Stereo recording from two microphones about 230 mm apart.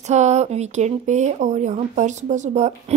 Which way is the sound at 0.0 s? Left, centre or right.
Right.